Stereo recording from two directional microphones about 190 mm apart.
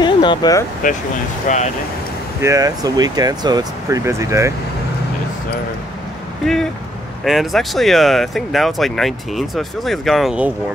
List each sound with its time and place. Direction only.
0.0 s speech: 25° left (ahead or behind)
1.5 s speech: 40° left (ahead or behind)
2.4 s speech: 20° right (ahead or behind)
6.4 s speech: 5° left (ahead or behind)